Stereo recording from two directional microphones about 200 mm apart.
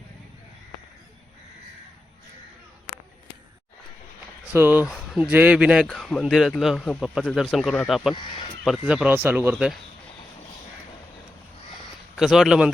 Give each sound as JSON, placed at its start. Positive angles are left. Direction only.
{"t": 4.5, "sound": "speech", "side_deg": -10}
{"t": 8.1, "sound": "speech", "side_deg": 25}
{"t": 8.9, "sound": "speech", "side_deg": -5}
{"t": 12.1, "sound": "speech", "side_deg": 0}